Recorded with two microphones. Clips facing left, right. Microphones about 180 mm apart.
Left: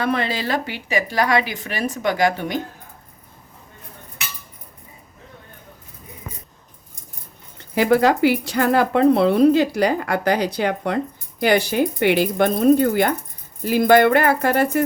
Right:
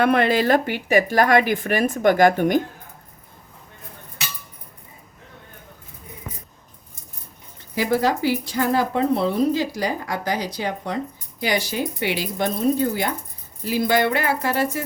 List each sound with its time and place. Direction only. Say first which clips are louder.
0.0 s a woman's voice: right 5 dB; 55° right (ahead or behind)
7.8 s speech: left 5 dB; 65° left (ahead or behind)